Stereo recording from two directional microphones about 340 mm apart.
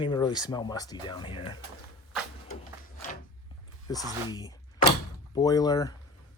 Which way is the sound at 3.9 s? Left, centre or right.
Centre.